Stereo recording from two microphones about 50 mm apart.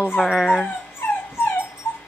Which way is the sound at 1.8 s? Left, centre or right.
Left.